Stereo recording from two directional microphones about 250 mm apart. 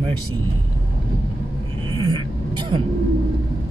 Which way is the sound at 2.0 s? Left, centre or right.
Centre.